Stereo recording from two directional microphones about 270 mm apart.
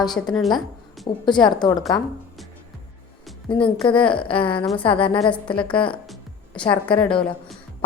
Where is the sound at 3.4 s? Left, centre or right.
Centre.